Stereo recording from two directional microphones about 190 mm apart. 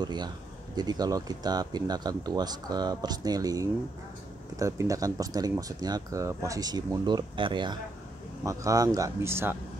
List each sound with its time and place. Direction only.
0.0 s speech: 20° right (ahead or behind)